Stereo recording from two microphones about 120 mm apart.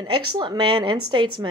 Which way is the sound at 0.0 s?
40° right (ahead or behind).